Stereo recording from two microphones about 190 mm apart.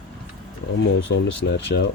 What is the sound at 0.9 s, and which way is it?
Speech, 70° left (ahead or behind).